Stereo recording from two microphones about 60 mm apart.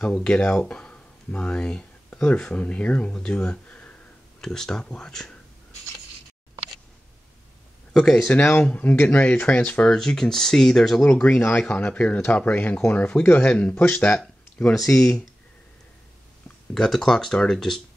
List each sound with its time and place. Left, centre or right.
0.1 s speech: centre
2.6 s speech: left
7.9 s speech: centre
8.4 s speech: left
9.8 s speech: centre
11.1 s speech: centre
11.3 s speech: left
14.7 s speech: centre
16.7 s speech: centre